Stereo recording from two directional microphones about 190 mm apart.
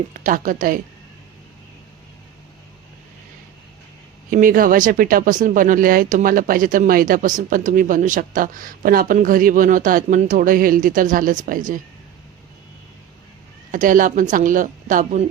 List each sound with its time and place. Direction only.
0.1 s speech: 45° right (ahead or behind)
4.3 s speech: 45° right (ahead or behind)
13.7 s speech: 45° right (ahead or behind)